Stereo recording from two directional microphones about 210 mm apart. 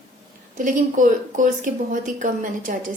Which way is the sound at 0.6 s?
35° right (ahead or behind).